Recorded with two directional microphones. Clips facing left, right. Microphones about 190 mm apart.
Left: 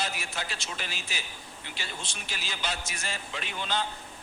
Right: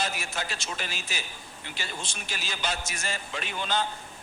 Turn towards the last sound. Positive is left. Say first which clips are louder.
# right 2 dB
turn(degrees=-45)  # may be behind; listen again after turning